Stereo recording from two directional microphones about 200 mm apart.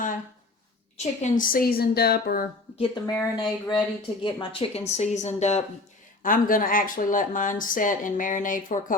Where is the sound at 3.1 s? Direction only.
20° left (ahead or behind).